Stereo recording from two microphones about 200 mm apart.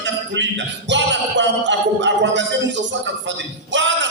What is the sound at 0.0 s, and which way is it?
Music, 65° right (ahead or behind).